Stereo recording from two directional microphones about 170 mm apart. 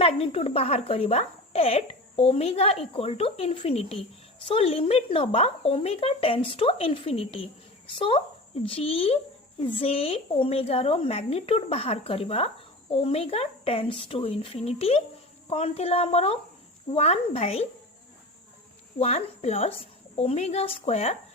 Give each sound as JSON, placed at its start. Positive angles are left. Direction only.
{"t": 0.0, "sound": "a woman's voice", "side_deg": 35}
{"t": 18.9, "sound": "a woman's voice", "side_deg": 40}